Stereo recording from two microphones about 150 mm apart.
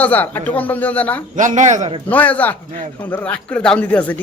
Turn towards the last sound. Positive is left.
turn(degrees=10)  # may be behind; listen again after turning